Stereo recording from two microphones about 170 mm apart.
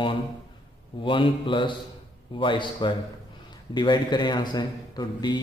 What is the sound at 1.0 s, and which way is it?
A man's voice, 30° left (ahead or behind).